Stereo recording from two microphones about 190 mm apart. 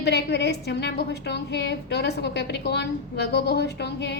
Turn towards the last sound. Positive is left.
turn(degrees=60)  # may be behind; listen again after turning